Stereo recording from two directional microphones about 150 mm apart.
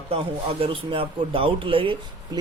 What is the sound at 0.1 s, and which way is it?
A man's voice, 35° right (ahead or behind).